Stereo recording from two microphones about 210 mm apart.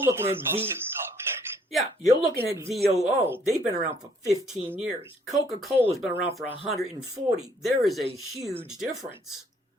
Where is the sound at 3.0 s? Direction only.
10° right (ahead or behind).